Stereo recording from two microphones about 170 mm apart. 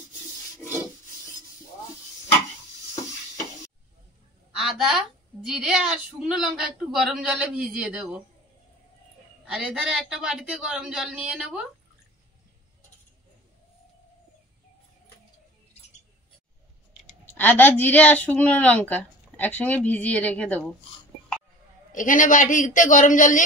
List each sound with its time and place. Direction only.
4.6 s a woman's voice: centre (ahead or behind)
9.4 s a woman's voice: 5° right (ahead or behind)
17.3 s a woman's voice: 10° left (ahead or behind)
21.9 s a man's voice: 50° left (ahead or behind)